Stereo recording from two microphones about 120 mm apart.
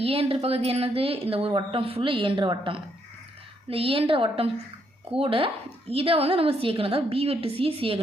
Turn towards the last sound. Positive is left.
turn(degrees=-50)  # may be behind; listen again after turning